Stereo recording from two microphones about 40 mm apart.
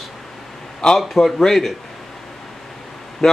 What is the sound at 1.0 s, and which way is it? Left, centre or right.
Speech, centre.